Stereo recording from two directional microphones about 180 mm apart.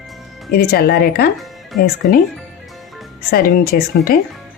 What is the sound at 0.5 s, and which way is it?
Speech, 60° left (ahead or behind).